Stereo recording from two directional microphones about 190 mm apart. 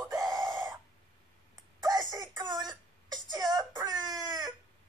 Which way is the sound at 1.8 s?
20° right (ahead or behind).